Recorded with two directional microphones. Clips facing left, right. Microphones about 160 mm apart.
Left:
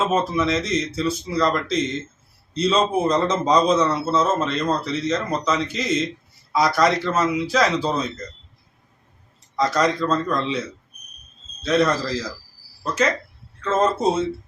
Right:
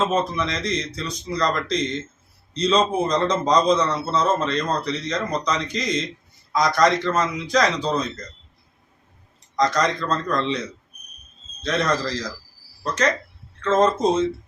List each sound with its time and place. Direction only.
0.0 s a man's voice: 5° left (ahead or behind)
9.6 s a man's voice: 5° left (ahead or behind)